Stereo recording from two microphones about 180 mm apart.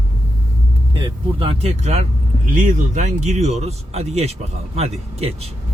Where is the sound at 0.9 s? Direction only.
30° right (ahead or behind).